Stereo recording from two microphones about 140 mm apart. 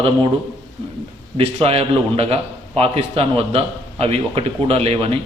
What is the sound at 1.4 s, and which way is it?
A man's voice, 45° right (ahead or behind).